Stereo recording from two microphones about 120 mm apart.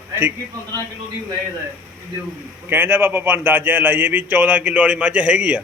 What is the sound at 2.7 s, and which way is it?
A man's voice, 20° right (ahead or behind).